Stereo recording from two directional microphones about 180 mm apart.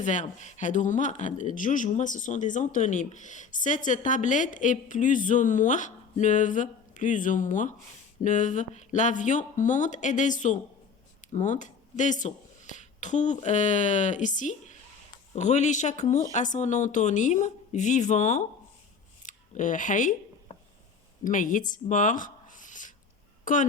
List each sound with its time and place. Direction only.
0.0 s a woman's voice: 40° left (ahead or behind)
19.2 s scissors: 45° left (ahead or behind)
21.2 s speech: 45° left (ahead or behind)